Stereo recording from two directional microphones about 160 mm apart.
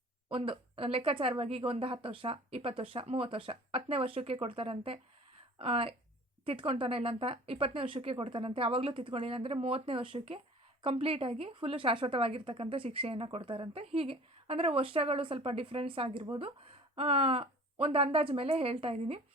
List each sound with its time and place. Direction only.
0.3 s speech: 35° right (ahead or behind)